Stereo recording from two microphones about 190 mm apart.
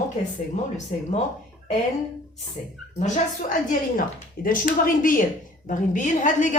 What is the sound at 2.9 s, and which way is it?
A woman's voice, 35° left (ahead or behind).